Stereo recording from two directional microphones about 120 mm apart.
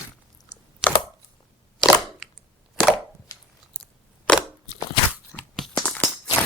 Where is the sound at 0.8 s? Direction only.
5° right (ahead or behind).